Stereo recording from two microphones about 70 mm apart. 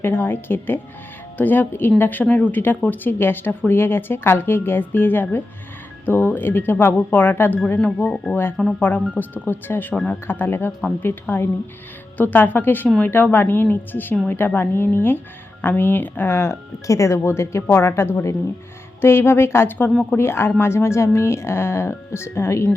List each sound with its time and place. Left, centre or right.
0.0 s speech: left
7.8 s speech: centre
8.8 s speech: left
10.7 s speech: centre
11.0 s speech: left